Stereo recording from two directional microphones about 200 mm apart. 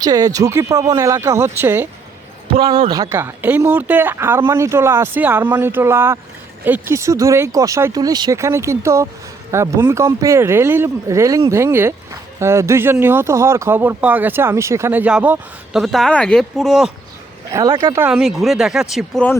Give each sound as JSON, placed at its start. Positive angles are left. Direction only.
{"t": 0.0, "sound": "speech", "side_deg": -20}
{"t": 2.5, "sound": "speech", "side_deg": -25}
{"t": 17.5, "sound": "speech", "side_deg": -15}